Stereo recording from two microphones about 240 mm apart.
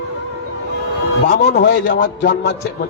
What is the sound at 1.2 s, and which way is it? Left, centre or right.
A man's voice, left.